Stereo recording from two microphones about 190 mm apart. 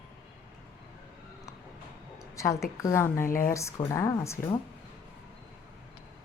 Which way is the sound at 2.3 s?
15° left (ahead or behind).